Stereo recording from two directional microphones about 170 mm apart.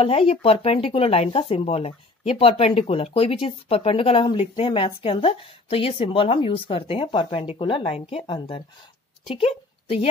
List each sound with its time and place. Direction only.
0.0 s a woman's voice: 35° left (ahead or behind)